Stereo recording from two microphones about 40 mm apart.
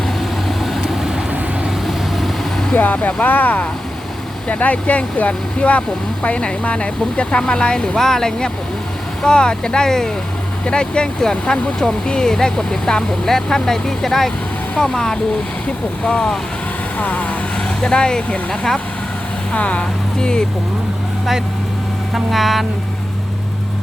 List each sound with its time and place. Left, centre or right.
0.4 s vehicle: centre
2.7 s speech: left
17.0 s speech: left
17.8 s speech: left
19.5 s speech: left
20.1 s speech: centre
22.1 s speech: centre